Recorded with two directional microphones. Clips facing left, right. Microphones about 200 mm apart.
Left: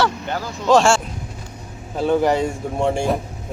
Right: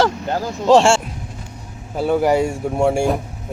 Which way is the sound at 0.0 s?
40° right (ahead or behind).